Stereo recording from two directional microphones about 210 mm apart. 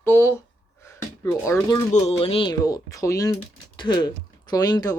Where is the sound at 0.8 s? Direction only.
15° left (ahead or behind).